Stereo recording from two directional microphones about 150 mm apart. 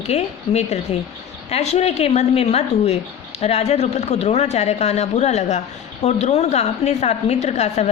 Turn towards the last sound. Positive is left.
turn(degrees=50)  # may be behind; listen again after turning